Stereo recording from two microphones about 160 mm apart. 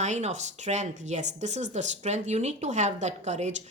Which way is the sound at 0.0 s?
45° right (ahead or behind).